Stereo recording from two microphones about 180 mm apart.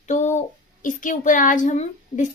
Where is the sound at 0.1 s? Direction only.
40° left (ahead or behind).